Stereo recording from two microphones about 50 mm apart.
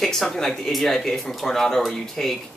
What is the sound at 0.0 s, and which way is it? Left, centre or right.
Speech, centre.